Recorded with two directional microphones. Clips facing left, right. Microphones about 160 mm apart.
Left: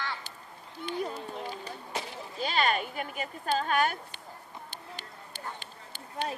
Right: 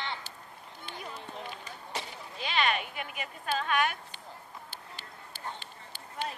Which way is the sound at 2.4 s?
40° left (ahead or behind).